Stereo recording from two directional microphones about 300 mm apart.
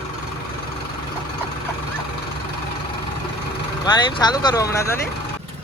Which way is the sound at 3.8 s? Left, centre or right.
Centre.